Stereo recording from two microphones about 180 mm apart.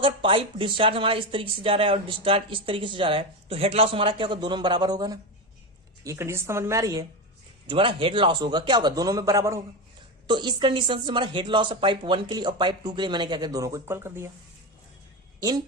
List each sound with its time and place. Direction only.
0.0 s a woman's voice: 30° right (ahead or behind); by 14.3 s 15° right (ahead or behind)
15.4 s speech: 20° right (ahead or behind)